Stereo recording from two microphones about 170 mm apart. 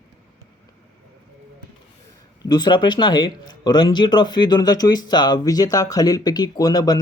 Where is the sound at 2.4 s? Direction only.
25° left (ahead or behind).